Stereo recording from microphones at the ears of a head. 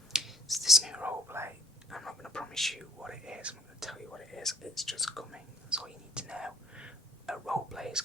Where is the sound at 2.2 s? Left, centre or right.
Centre.